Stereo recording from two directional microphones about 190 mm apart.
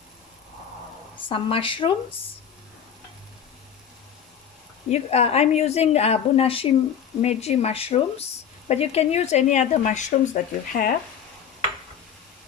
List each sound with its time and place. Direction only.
1.3 s speech: 30° left (ahead or behind)
4.9 s speech: 35° left (ahead or behind)